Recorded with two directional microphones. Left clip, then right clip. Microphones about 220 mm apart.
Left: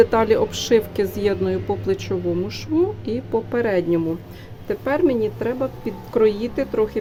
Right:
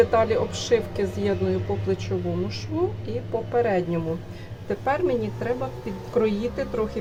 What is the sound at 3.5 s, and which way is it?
A woman's voice, 50° left (ahead or behind).